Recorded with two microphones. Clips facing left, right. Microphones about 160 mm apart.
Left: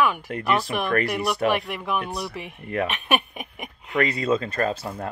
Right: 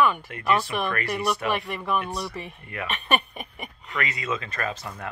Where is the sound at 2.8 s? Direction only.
5° left (ahead or behind).